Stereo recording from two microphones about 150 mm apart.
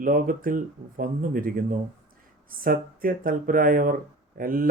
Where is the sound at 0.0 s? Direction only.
65° right (ahead or behind).